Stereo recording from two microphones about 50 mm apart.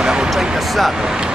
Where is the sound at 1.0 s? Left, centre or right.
Centre.